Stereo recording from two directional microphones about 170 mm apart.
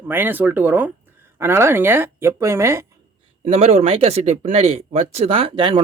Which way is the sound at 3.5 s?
40° right (ahead or behind).